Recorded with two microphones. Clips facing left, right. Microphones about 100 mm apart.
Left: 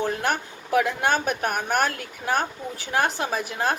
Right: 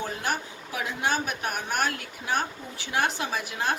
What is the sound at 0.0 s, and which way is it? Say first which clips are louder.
Speech: left 5 dB; 55° left (ahead or behind).